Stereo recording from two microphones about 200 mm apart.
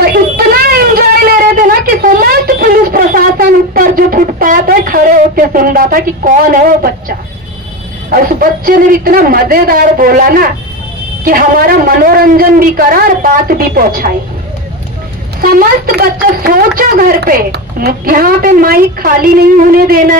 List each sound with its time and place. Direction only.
0.0 s a sound: 50° right (ahead or behind)
8.1 s a woman's voice: 45° right (ahead or behind)
15.4 s a woman's voice: 50° right (ahead or behind)